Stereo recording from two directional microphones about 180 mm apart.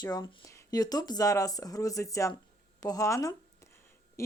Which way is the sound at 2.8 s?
20° left (ahead or behind).